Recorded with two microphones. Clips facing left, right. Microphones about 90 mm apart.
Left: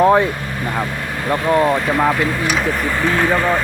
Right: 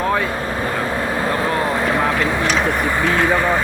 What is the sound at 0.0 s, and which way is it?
Speech, 30° left (ahead or behind).